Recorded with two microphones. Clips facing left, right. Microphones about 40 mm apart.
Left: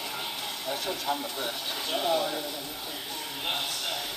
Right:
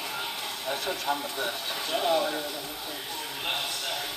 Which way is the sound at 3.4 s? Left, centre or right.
Right.